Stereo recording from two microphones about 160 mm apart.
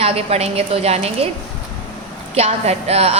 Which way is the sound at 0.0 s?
40° right (ahead or behind).